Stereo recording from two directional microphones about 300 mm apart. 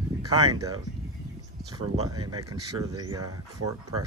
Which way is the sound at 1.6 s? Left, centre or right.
Centre.